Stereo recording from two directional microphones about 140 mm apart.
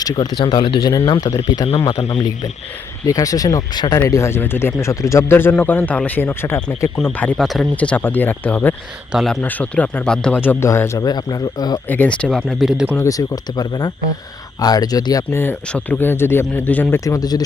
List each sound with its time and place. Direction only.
0.0 s speech: 30° left (ahead or behind)
3.1 s speech: 25° left (ahead or behind)
7.0 s speech: 10° left (ahead or behind)
7.8 s speech: 10° left (ahead or behind)
9.1 s speech: centre (ahead or behind); by 11.8 s 30° left (ahead or behind)
11.9 s speech: 10° left (ahead or behind)
12.5 s speech: centre (ahead or behind)
12.9 s speech: 20° left (ahead or behind)
17.0 s speech: 25° left (ahead or behind)